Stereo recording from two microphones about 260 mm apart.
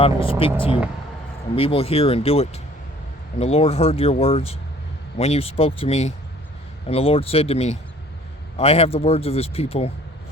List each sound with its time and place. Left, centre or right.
0.0 s speech: left